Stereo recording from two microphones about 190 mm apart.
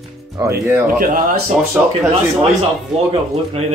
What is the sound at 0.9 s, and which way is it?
Speech, 45° right (ahead or behind).